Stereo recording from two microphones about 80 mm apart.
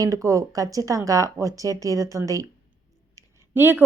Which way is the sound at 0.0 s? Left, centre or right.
Right.